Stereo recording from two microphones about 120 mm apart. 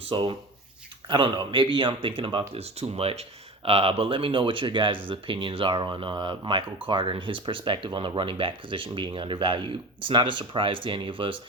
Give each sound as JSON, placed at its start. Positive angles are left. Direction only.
{"t": 0.1, "sound": "speech", "side_deg": -45}